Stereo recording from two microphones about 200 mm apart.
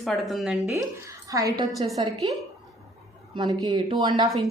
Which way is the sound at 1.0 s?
15° right (ahead or behind).